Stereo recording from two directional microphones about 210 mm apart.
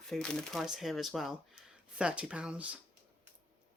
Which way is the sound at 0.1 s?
Centre (ahead or behind).